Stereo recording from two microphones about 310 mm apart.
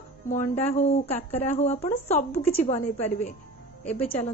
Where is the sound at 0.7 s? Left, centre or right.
Centre.